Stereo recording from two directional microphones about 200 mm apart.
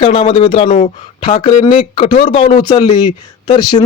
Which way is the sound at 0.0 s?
30° left (ahead or behind).